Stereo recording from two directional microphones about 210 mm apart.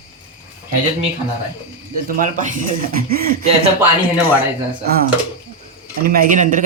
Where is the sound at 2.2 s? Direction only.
40° right (ahead or behind).